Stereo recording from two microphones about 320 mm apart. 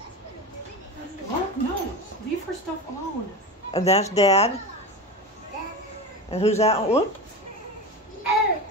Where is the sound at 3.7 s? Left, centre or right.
Centre.